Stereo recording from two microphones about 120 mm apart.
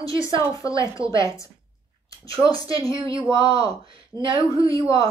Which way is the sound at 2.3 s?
45° right (ahead or behind).